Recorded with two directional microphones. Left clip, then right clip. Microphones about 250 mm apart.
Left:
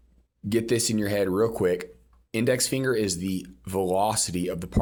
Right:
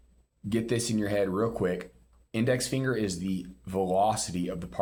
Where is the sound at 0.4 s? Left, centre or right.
Left.